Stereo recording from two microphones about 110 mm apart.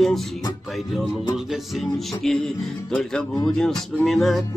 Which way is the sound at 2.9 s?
5° left (ahead or behind).